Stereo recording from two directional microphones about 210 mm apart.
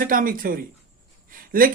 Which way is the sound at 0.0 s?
40° right (ahead or behind).